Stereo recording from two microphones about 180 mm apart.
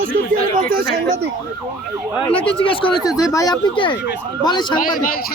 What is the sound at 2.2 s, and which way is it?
Speech, 30° left (ahead or behind).